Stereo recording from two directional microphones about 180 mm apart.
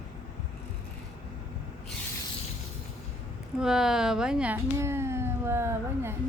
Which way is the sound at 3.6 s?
5° right (ahead or behind).